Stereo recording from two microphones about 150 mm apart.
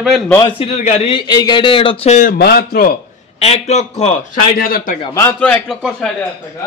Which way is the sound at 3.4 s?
45° left (ahead or behind).